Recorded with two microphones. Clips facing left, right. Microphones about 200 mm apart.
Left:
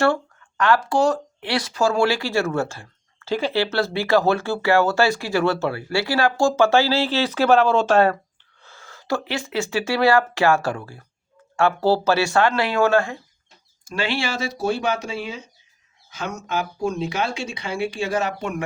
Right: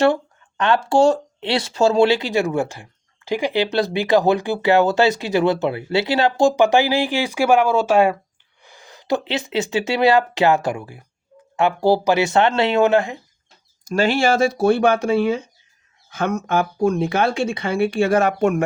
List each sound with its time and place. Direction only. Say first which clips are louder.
0.0 s speech: right 3 dB; 20° right (ahead or behind)
13.8 s speech: right 8 dB; 40° right (ahead or behind)